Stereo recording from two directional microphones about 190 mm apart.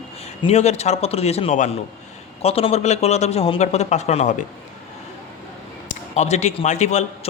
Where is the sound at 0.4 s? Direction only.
35° left (ahead or behind).